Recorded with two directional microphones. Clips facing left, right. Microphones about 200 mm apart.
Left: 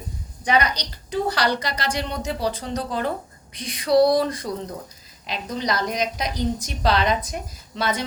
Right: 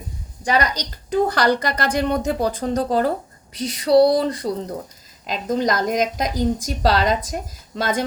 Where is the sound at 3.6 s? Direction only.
40° right (ahead or behind).